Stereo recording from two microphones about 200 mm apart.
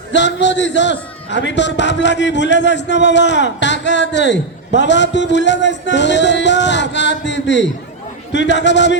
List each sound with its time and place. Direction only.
0.1 s a man's voice: 60° left (ahead or behind)